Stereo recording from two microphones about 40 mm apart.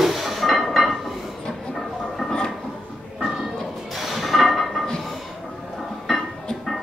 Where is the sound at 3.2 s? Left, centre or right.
Right.